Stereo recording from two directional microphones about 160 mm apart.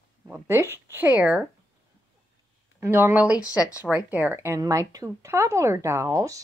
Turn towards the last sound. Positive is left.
turn(degrees=-20)  # may be behind; listen again after turning